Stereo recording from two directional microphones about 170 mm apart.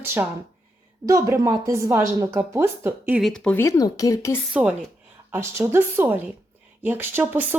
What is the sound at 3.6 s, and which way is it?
Speech, 20° left (ahead or behind).